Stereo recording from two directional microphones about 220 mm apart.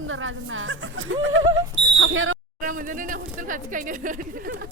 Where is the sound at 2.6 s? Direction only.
40° right (ahead or behind).